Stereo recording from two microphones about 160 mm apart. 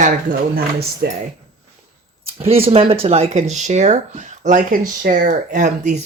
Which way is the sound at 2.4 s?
35° right (ahead or behind).